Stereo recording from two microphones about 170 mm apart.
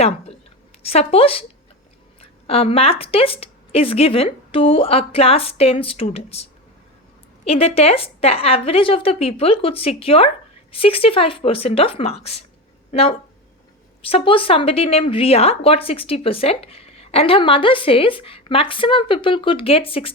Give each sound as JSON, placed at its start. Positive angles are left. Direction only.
{"t": 0.8, "sound": "speech", "side_deg": 35}
{"t": 2.5, "sound": "speech", "side_deg": 35}